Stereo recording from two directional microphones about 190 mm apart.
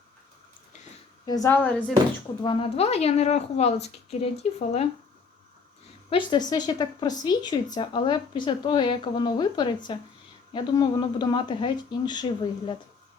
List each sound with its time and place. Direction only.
1.2 s a woman's voice: 20° left (ahead or behind)
2.4 s a woman's voice: 30° left (ahead or behind)
6.1 s speech: 25° left (ahead or behind)